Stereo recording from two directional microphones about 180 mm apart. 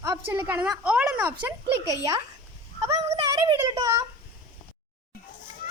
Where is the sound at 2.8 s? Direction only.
15° right (ahead or behind).